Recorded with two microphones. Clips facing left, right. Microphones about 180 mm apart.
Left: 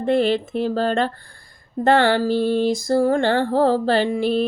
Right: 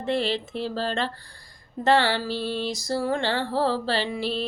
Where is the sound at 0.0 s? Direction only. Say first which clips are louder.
Left 7 dB; 50° left (ahead or behind).